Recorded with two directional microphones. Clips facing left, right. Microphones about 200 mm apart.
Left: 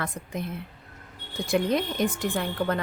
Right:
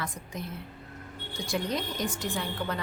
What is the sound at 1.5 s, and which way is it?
A woman's voice, 55° left (ahead or behind).